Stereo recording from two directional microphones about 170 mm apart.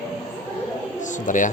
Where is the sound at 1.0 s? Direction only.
50° left (ahead or behind).